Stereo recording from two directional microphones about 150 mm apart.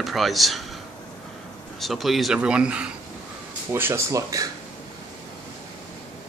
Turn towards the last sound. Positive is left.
turn(degrees=-20)  # may be behind; listen again after turning